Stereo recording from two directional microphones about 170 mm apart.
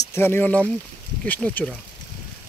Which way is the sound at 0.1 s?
15° left (ahead or behind).